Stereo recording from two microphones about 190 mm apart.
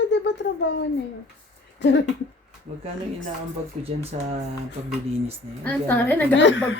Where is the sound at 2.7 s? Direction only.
35° right (ahead or behind).